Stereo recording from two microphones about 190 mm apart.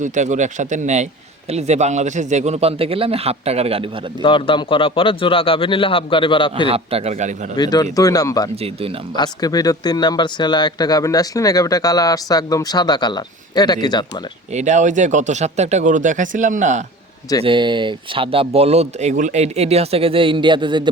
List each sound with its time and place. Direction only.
0.0 s a man's voice: 40° right (ahead or behind)
4.2 s speech: 25° left (ahead or behind)
6.7 s a man's voice: 30° right (ahead or behind)
7.5 s speech: 20° left (ahead or behind)
14.5 s a man's voice: 40° right (ahead or behind)
17.4 s speech: 25° right (ahead or behind)